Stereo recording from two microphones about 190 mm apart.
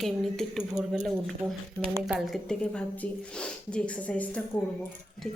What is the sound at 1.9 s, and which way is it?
Speech, 15° right (ahead or behind).